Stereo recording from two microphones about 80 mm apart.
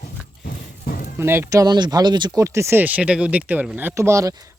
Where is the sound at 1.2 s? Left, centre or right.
Right.